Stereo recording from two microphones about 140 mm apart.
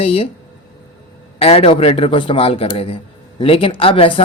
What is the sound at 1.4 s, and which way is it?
A man's voice, 45° left (ahead or behind).